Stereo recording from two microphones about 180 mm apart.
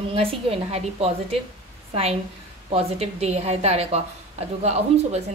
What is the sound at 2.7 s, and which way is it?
A woman's voice, 35° right (ahead or behind).